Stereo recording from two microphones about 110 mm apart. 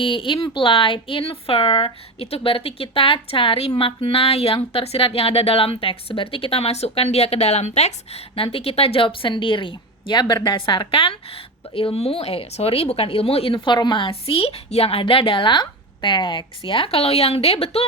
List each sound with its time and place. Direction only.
0.0 s speech: 50° left (ahead or behind)